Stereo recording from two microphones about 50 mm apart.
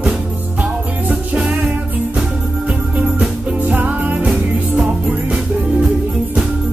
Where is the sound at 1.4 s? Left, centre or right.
Right.